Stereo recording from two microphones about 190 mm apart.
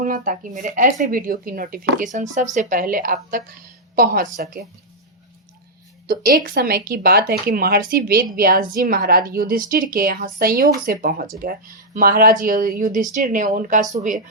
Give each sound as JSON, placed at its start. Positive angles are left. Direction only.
{"t": 0.0, "sound": "speech", "side_deg": -45}
{"t": 6.1, "sound": "a woman's voice", "side_deg": -50}